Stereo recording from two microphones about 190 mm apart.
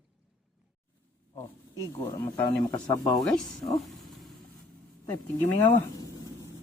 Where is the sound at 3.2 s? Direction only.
Centre (ahead or behind).